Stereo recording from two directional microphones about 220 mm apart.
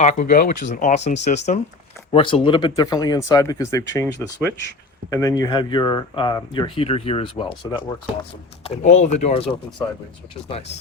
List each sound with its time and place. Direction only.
0.0 s speech: 35° left (ahead or behind)
8.7 s speech: 30° left (ahead or behind)